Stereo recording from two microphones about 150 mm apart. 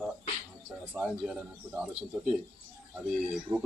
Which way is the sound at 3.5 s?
10° right (ahead or behind).